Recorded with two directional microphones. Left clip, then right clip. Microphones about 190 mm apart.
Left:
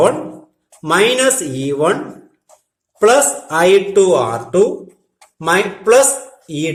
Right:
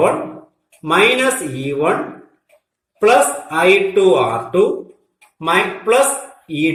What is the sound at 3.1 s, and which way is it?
Speech, 40° left (ahead or behind).